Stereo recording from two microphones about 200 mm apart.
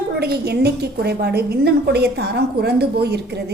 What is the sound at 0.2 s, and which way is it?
A woman's voice, 55° right (ahead or behind).